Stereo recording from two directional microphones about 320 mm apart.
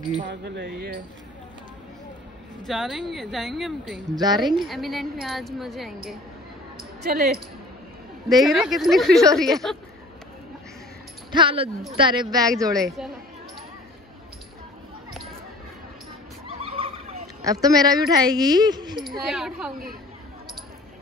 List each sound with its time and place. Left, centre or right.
0.2 s speech: right
2.6 s a woman's voice: centre
4.1 s speech: centre
4.6 s a woman's voice: centre
7.0 s a woman's voice: right
8.3 s a woman's voice: centre
11.3 s speech: centre
12.7 s a woman's voice: centre
17.4 s speech: centre
19.0 s a woman's voice: centre